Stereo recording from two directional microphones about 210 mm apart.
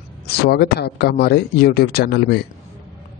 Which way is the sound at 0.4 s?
50° left (ahead or behind).